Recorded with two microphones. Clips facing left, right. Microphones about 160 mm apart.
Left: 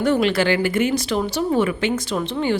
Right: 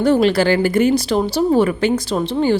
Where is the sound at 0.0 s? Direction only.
35° right (ahead or behind).